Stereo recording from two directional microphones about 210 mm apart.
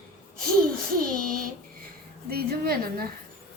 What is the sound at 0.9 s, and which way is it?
A woman's voice, 40° right (ahead or behind).